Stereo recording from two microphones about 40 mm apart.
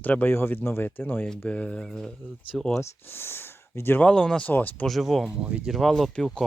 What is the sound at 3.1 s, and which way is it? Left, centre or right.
Speech, left.